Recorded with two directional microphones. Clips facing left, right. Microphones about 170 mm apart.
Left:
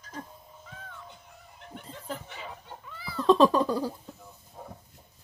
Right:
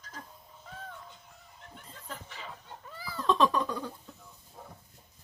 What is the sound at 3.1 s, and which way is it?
Cat, 35° left (ahead or behind).